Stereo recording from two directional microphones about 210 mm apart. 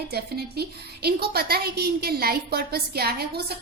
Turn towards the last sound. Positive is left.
turn(degrees=-50)  # may be behind; listen again after turning